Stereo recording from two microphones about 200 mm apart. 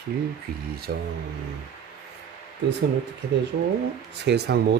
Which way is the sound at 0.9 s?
50° right (ahead or behind).